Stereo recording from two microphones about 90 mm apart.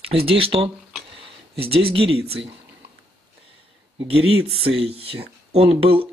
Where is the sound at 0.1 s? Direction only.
90° right.